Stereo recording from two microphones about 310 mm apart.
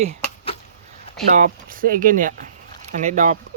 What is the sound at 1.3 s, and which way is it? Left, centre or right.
Speech, right.